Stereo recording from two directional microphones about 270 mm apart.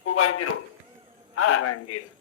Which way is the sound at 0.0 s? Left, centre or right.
Left.